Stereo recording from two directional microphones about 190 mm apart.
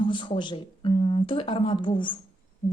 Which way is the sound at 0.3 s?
25° left (ahead or behind).